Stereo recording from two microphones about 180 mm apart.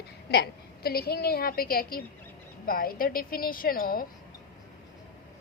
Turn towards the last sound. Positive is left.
turn(degrees=55)  # may be behind; listen again after turning